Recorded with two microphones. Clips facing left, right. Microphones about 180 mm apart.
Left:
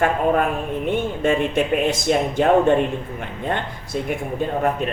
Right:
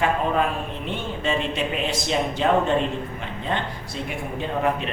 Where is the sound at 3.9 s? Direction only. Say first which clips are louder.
Left 7 dB; 50° left (ahead or behind).